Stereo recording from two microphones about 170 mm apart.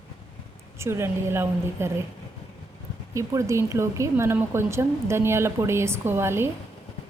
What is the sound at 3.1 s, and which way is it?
A woman's voice, 15° right (ahead or behind).